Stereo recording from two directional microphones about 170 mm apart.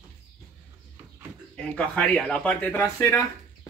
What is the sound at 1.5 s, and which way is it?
Speech, 5° left (ahead or behind).